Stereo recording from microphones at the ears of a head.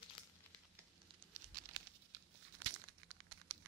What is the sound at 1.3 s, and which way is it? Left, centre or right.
Crumpling, right.